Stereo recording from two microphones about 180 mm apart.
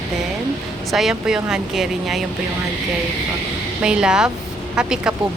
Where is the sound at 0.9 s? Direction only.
Centre (ahead or behind).